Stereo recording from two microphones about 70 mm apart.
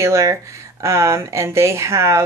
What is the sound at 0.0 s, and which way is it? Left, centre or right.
Speech, right.